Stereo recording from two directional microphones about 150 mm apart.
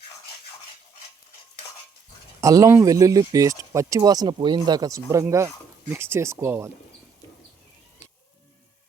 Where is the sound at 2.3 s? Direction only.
20° right (ahead or behind).